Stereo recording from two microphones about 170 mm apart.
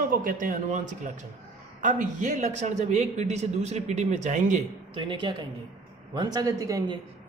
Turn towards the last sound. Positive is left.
turn(degrees=-20)  # may be behind; listen again after turning